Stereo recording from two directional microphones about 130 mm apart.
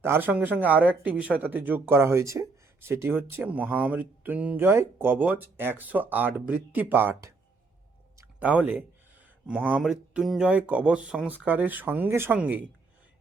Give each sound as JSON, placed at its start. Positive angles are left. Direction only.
{"t": 0.0, "sound": "speech", "side_deg": -15}
{"t": 8.4, "sound": "speech", "side_deg": -10}